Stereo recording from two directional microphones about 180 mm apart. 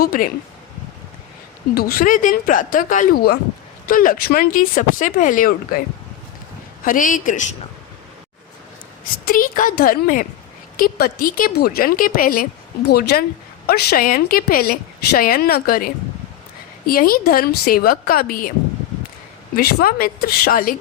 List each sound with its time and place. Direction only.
0.0 s a woman's voice: 55° left (ahead or behind)
1.7 s a woman's voice: 55° left (ahead or behind)
6.8 s a woman's voice: 50° left (ahead or behind)
9.2 s a woman's voice: 50° left (ahead or behind)
19.5 s a woman's voice: 55° left (ahead or behind)